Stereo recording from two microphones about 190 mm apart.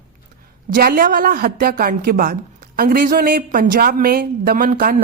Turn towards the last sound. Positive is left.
turn(degrees=-50)  # may be behind; listen again after turning